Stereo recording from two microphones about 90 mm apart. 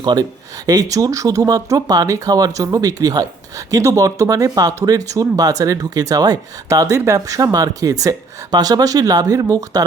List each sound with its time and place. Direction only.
0.0 s speech: 50° right (ahead or behind)